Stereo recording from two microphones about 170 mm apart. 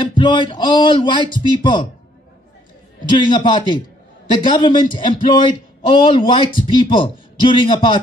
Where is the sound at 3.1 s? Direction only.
25° left (ahead or behind).